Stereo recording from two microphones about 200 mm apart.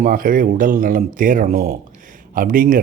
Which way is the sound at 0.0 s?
45° right (ahead or behind).